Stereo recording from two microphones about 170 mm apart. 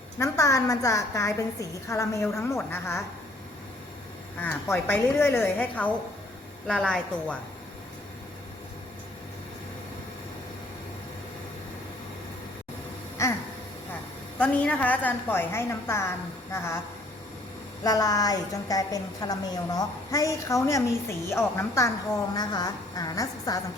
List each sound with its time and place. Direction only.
0.2 s a woman's voice: 20° left (ahead or behind)
4.4 s a woman's voice: 10° left (ahead or behind)
14.3 s a woman's voice: 10° left (ahead or behind)
17.8 s a woman's voice: 20° left (ahead or behind)